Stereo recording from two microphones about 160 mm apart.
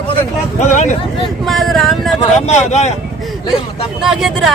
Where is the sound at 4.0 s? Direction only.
Centre (ahead or behind).